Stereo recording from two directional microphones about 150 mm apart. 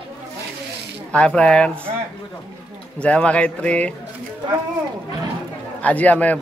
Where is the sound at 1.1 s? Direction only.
5° left (ahead or behind).